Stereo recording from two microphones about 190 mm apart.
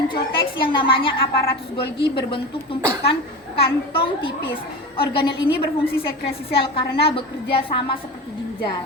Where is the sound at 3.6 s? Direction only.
25° left (ahead or behind).